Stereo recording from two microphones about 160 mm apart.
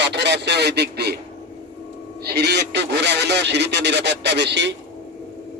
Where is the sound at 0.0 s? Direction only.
90° right.